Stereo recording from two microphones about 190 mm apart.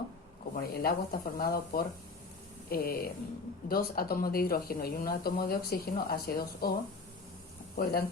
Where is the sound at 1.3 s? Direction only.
50° left (ahead or behind).